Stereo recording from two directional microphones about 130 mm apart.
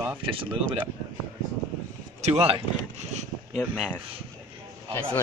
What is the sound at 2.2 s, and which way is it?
Speech, 50° right (ahead or behind).